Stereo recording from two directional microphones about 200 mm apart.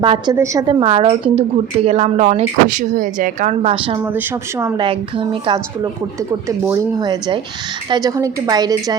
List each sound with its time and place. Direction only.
0.0 s a woman's voice: 20° right (ahead or behind)
4.0 s speech: 10° right (ahead or behind)
4.9 s a woman's voice: 25° right (ahead or behind)